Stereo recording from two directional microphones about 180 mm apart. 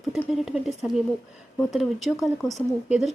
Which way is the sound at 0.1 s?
Centre (ahead or behind).